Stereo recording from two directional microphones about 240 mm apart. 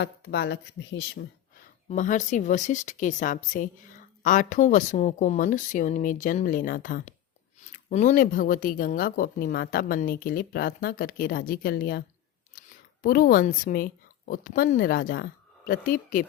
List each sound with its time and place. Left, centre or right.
0.0 s speech: left
1.9 s a woman's voice: left